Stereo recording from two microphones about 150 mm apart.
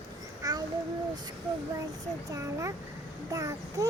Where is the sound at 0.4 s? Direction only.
25° right (ahead or behind).